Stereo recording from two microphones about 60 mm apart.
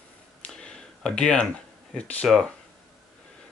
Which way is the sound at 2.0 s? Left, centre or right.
Left.